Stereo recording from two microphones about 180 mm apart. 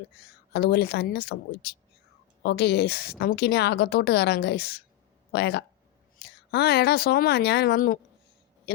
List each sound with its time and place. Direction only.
0.5 s a woman's voice: 65° left (ahead or behind)